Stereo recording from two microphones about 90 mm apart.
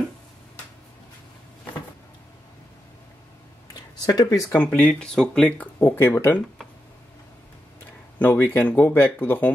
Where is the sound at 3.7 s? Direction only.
50° left (ahead or behind).